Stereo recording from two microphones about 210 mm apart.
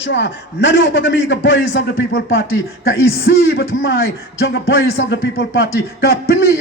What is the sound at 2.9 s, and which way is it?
Speech, 50° left (ahead or behind).